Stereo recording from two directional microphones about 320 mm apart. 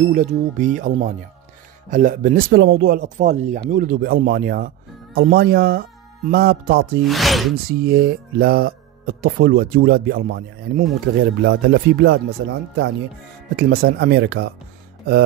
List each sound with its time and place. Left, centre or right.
0.1 s speech: right
7.1 s speech: centre
7.8 s speech: right